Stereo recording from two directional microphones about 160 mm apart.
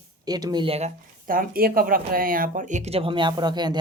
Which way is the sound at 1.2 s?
60° right (ahead or behind).